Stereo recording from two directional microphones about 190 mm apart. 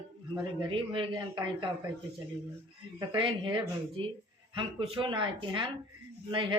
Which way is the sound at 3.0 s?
25° right (ahead or behind).